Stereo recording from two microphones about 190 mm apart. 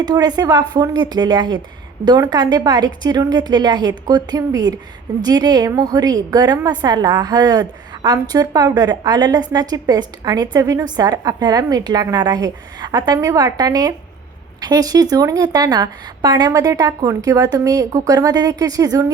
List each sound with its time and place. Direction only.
0.0 s a woman's voice: 20° right (ahead or behind)